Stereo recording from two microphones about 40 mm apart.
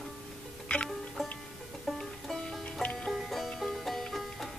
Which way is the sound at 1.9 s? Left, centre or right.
Centre.